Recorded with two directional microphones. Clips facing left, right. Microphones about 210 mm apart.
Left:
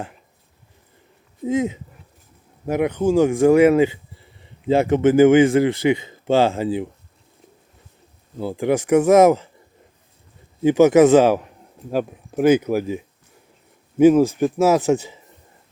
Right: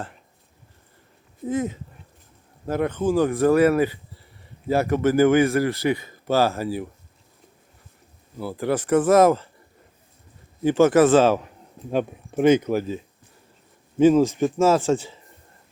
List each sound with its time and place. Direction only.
1.5 s a man's voice: 15° left (ahead or behind)
8.4 s speech: 20° left (ahead or behind)
10.6 s speech: 15° left (ahead or behind)